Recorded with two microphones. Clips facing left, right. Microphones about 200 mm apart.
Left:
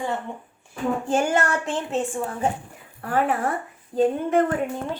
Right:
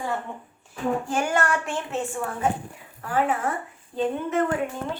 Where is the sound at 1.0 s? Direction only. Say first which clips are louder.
Left 3 dB; 25° left (ahead or behind).